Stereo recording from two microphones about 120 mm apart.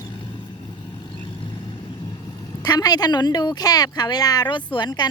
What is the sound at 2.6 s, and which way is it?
Speech, 35° left (ahead or behind).